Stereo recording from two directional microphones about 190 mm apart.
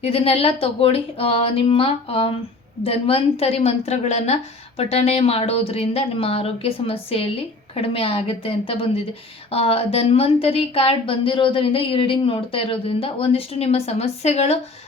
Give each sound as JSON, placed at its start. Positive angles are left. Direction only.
{"t": 0.0, "sound": "a woman's voice", "side_deg": 30}